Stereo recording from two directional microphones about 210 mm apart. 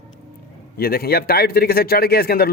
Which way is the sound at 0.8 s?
45° left (ahead or behind).